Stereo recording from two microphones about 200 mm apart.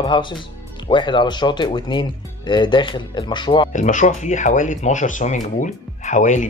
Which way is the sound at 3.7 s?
40° left (ahead or behind).